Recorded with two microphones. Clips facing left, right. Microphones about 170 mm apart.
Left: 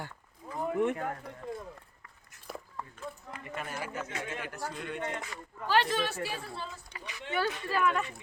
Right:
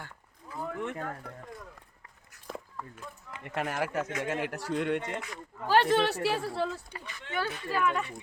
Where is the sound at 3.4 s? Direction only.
75° right (ahead or behind).